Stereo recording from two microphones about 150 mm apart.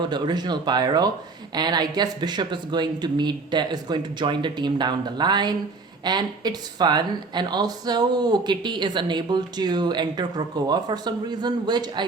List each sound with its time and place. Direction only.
0.0 s speech: 30° right (ahead or behind)